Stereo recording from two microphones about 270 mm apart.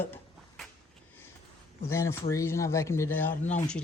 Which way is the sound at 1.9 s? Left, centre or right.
Centre.